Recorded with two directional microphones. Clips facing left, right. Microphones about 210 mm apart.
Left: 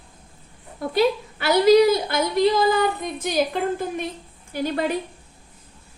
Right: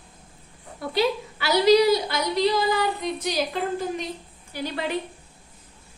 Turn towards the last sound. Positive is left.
turn(degrees=45)  # may be behind; listen again after turning